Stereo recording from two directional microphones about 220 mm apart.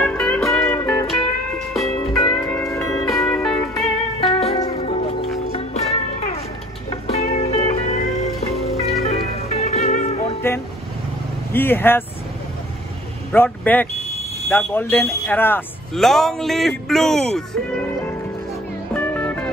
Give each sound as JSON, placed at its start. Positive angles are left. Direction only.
{"t": 0.0, "sound": "music", "side_deg": 5}
{"t": 2.6, "sound": "music", "side_deg": 15}
{"t": 3.1, "sound": "music", "side_deg": 0}
{"t": 4.3, "sound": "music", "side_deg": 25}
{"t": 6.9, "sound": "music", "side_deg": 30}
{"t": 10.4, "sound": "vehicle", "side_deg": 10}
{"t": 11.5, "sound": "speech", "side_deg": 10}
{"t": 13.3, "sound": "speech", "side_deg": 10}
{"t": 18.9, "sound": "music", "side_deg": 5}